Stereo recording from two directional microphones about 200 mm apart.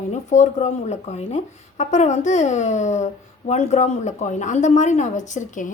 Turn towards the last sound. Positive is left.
turn(degrees=40)  # may be behind; listen again after turning